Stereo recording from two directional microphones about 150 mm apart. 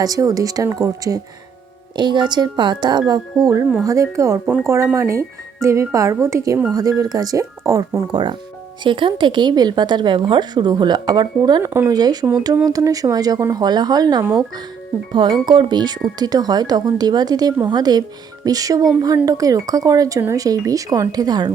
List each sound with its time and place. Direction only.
0.0 s a woman's voice: 25° right (ahead or behind)
11.6 s a woman's voice: 15° right (ahead or behind)